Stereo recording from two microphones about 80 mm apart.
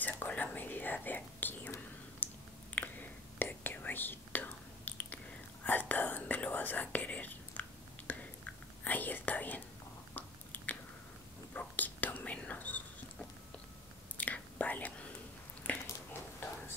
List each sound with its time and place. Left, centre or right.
0.0 s whispering: left
2.7 s whispering: left
10.1 s biting: left
11.5 s whispering: left
14.1 s whispering: centre
15.6 s a sound: left